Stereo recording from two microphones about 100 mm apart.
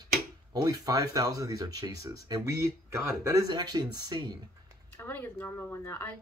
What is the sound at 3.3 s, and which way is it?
Speech, 35° right (ahead or behind).